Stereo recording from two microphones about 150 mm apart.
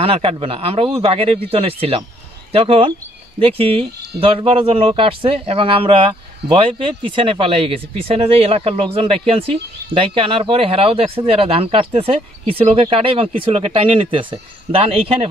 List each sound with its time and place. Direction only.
0.0 s speech: 35° right (ahead or behind)